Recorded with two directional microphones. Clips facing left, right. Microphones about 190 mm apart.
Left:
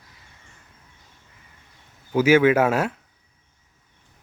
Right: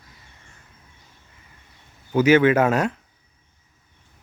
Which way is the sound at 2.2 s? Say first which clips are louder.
Right 1 dB; 10° left (ahead or behind).